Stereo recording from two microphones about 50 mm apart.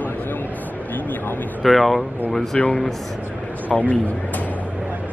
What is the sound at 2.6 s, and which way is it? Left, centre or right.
Speech, left.